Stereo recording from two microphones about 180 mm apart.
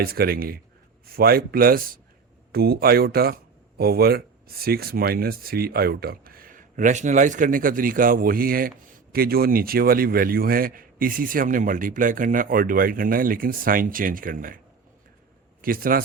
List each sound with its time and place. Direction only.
0.0 s a man's voice: 55° right (ahead or behind)
15.6 s a man's voice: 50° right (ahead or behind)